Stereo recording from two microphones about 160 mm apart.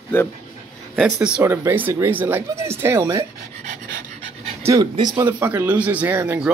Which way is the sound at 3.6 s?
70° right (ahead or behind).